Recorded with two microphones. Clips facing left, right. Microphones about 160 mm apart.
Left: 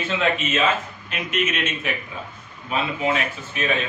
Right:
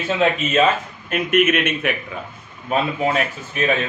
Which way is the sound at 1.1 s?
55° right (ahead or behind).